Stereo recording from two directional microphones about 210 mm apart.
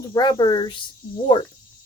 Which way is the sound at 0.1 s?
20° left (ahead or behind).